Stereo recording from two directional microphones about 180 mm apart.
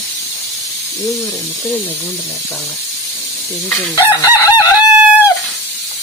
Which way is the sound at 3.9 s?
20° left (ahead or behind).